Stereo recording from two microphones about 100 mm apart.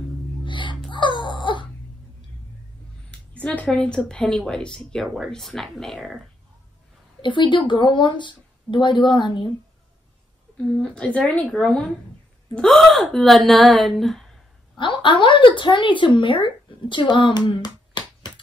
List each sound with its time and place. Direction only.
0.4 s a sound: 50° left (ahead or behind)
3.1 s a sound: 10° left (ahead or behind)
4.1 s speech: 5° left (ahead or behind)
7.2 s speech: 50° left (ahead or behind)
10.8 s speech: 10° left (ahead or behind)
14.8 s speech: 55° left (ahead or behind)